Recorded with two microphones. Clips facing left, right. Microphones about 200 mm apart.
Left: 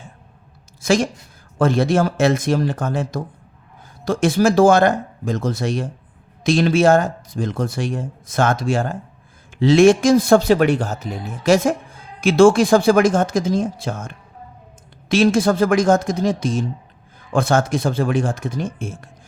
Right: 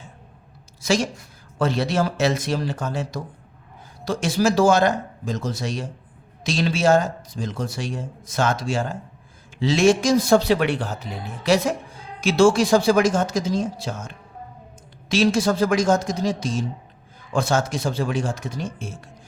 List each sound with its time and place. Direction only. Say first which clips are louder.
0.8 s speech: left 4 dB; 55° left (ahead or behind)